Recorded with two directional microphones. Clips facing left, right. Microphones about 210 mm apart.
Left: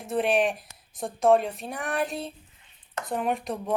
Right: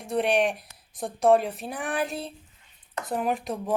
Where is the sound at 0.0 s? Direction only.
Centre (ahead or behind).